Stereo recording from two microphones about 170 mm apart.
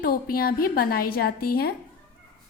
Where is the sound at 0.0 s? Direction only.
60° left (ahead or behind).